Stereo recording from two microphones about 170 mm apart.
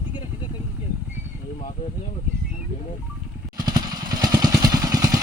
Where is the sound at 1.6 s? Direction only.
40° left (ahead or behind).